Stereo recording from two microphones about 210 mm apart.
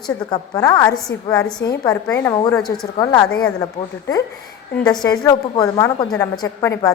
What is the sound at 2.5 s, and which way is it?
Speech, centre (ahead or behind).